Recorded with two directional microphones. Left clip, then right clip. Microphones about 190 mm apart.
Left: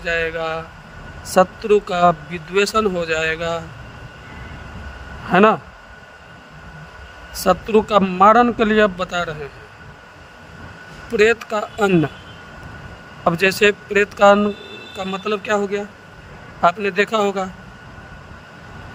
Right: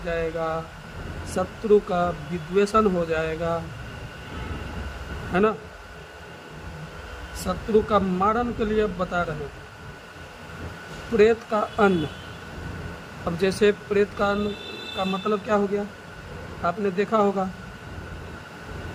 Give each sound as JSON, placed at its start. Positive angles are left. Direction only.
{"t": 0.0, "sound": "a man's voice", "side_deg": 45}
{"t": 5.3, "sound": "a man's voice", "side_deg": 45}
{"t": 7.4, "sound": "a man's voice", "side_deg": 45}
{"t": 11.2, "sound": "a man's voice", "side_deg": 45}
{"t": 13.2, "sound": "a man's voice", "side_deg": 40}